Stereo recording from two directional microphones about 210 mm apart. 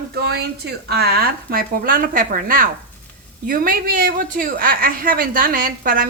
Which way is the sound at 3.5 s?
40° right (ahead or behind).